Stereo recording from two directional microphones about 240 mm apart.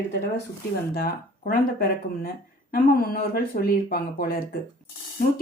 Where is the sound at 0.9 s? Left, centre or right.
Left.